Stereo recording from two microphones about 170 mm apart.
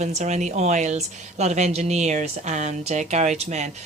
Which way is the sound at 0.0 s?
45° right (ahead or behind).